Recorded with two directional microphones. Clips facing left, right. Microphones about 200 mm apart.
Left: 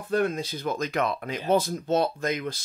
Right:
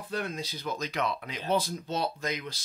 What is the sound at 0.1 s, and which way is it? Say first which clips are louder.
Speech: left 9 dB; 50° left (ahead or behind).